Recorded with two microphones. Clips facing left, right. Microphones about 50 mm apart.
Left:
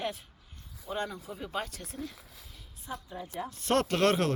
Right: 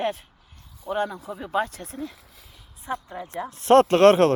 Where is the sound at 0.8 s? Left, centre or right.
Right.